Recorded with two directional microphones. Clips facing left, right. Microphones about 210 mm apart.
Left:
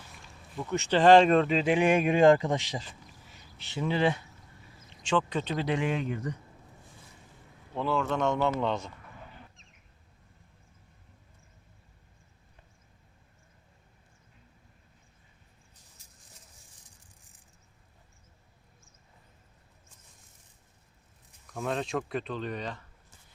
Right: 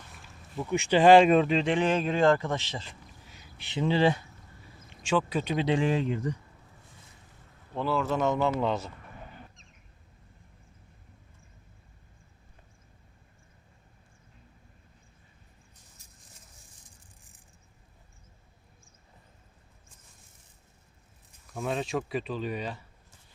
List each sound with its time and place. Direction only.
0.7 s speech: 10° right (ahead or behind); by 2.9 s 15° left (ahead or behind)
3.6 s speech: 20° right (ahead or behind)
3.8 s speech: 30° right (ahead or behind)
5.0 s speech: 10° right (ahead or behind)
5.5 s speech: 25° right (ahead or behind)
7.8 s speech: centre (ahead or behind)
21.4 s speech: 5° right (ahead or behind)